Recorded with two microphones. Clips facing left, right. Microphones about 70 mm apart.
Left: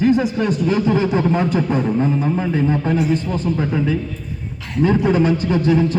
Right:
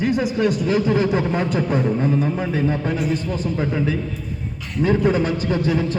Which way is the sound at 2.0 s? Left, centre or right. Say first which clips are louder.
Left 1 dB; centre.